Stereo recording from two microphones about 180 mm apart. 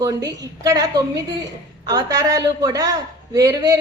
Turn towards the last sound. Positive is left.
turn(degrees=-20)  # may be behind; listen again after turning